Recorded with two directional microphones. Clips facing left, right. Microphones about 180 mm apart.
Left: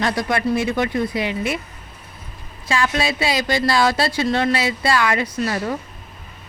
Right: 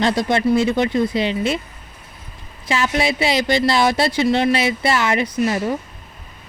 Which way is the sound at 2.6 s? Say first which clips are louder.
Right 1 dB; 20° right (ahead or behind).